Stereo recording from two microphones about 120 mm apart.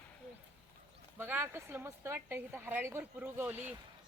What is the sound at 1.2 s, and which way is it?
A woman's voice, 20° right (ahead or behind).